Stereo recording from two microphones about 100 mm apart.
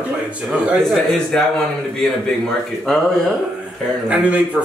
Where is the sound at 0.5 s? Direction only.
Centre (ahead or behind).